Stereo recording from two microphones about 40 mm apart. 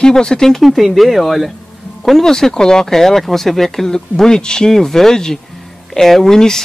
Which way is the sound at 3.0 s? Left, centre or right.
Centre.